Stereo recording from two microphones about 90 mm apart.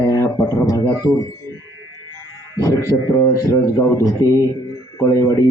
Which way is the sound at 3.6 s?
35° left (ahead or behind).